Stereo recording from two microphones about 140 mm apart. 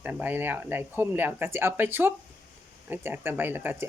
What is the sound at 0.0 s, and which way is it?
Speech, 10° right (ahead or behind).